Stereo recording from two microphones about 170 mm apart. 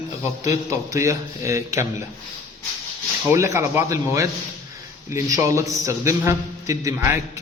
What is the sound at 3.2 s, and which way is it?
A man's voice, 15° right (ahead or behind).